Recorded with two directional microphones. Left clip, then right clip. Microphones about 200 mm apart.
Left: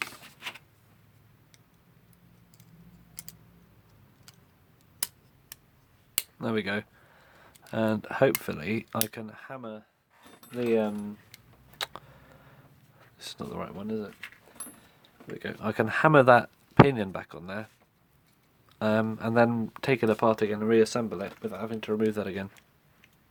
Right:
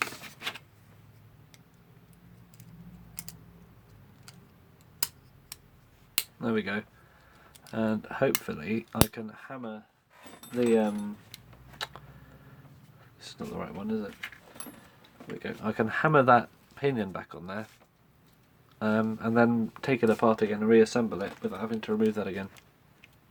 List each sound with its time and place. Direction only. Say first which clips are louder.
0.0 s a sound: right 3 dB; 15° left (ahead or behind)
6.4 s speech: left 2 dB; 45° left (ahead or behind)
11.8 s a sound: left 2 dB; 45° left (ahead or behind)
13.1 s speech: left 1 dB; 45° left (ahead or behind)
15.4 s speech: left 2 dB; 45° left (ahead or behind)
18.8 s speech: left 2 dB; 40° left (ahead or behind)